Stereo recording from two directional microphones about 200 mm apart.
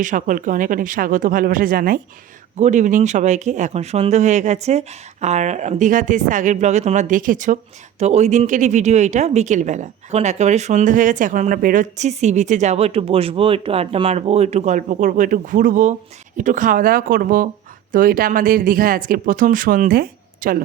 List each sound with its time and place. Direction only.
0.0 s speech: 40° right (ahead or behind)